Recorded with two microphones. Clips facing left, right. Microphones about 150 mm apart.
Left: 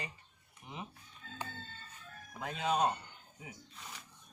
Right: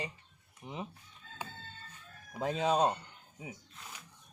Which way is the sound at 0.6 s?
35° right (ahead or behind).